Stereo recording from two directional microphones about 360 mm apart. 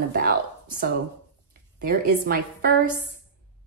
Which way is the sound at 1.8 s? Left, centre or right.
Right.